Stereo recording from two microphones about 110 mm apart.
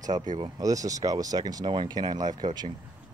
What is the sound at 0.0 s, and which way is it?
Speech, 35° right (ahead or behind).